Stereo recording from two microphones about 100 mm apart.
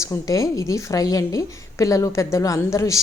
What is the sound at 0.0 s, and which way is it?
A woman's voice, 35° left (ahead or behind).